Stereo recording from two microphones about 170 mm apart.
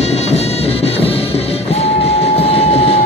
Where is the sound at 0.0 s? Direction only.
40° left (ahead or behind).